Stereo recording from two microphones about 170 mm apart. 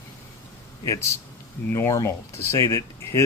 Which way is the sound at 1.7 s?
20° left (ahead or behind).